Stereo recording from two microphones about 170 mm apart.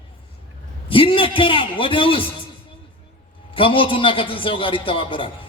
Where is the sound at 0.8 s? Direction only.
30° left (ahead or behind).